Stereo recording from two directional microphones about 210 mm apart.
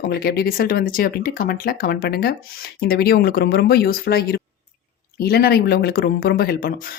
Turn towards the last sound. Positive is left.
turn(degrees=45)  # may be behind; listen again after turning